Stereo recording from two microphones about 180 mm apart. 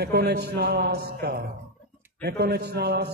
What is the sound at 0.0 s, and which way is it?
A man's voice, 65° right (ahead or behind).